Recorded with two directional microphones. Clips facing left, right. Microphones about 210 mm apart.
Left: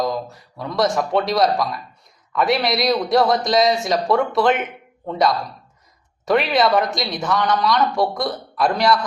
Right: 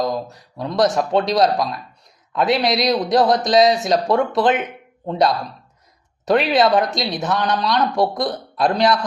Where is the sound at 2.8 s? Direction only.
Centre (ahead or behind).